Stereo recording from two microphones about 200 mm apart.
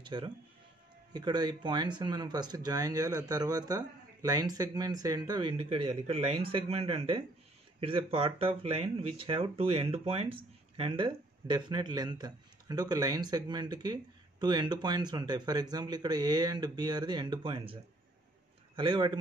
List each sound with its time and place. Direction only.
0.0 s speech: 25° right (ahead or behind)
18.8 s speech: 25° right (ahead or behind)